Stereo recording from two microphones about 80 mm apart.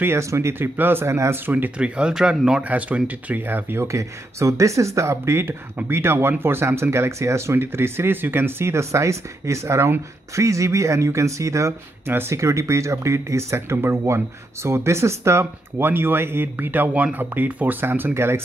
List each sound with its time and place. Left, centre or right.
0.0 s speech: right
3.8 s speech: right